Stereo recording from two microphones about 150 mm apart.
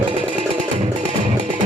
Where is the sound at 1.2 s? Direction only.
60° right (ahead or behind).